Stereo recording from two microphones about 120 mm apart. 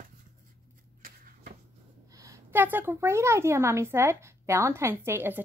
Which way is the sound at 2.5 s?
15° right (ahead or behind).